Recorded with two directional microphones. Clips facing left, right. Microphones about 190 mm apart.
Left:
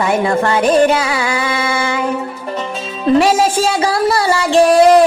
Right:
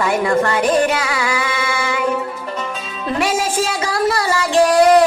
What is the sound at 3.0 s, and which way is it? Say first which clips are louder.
A woman's voice: left 8 dB; 30° left (ahead or behind).